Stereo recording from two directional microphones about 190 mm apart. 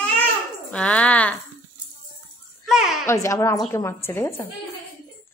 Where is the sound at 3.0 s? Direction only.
15° left (ahead or behind).